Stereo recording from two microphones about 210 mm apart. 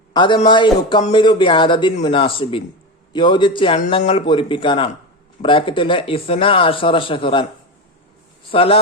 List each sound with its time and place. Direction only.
0.1 s a man's voice: 20° left (ahead or behind)
3.8 s a man's voice: 35° left (ahead or behind)
8.5 s a man's voice: 25° left (ahead or behind)